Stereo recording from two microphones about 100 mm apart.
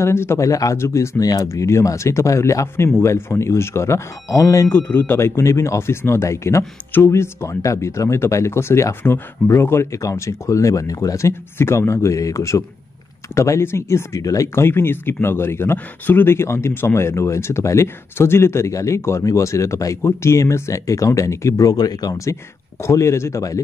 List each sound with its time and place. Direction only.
0.0 s speech: 25° left (ahead or behind)
4.6 s speech: 20° left (ahead or behind)